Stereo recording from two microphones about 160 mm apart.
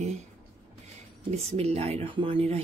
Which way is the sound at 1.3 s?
40° right (ahead or behind).